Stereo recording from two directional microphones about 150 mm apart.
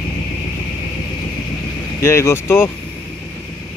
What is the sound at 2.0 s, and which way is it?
Speech, 20° left (ahead or behind).